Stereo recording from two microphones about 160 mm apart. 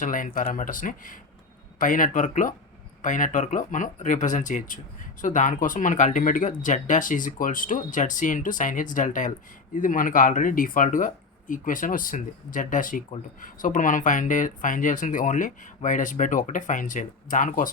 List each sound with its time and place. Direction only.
0.0 s speech: 55° left (ahead or behind)